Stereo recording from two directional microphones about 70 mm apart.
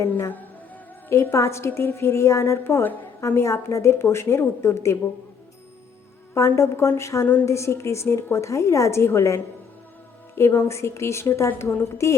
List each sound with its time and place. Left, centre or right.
1.1 s a woman's voice: left
6.3 s a woman's voice: left